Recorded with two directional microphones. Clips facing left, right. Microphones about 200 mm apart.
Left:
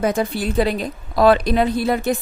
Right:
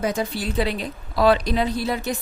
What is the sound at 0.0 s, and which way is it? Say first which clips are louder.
A woman's voice: left 4 dB; 55° left (ahead or behind).